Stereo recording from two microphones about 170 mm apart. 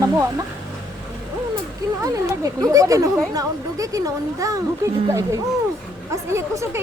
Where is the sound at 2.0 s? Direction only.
20° right (ahead or behind).